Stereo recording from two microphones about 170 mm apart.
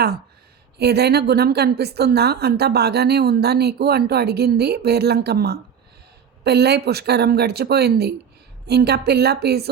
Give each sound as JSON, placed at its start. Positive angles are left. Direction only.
{"t": 0.8, "sound": "a woman's voice", "side_deg": -75}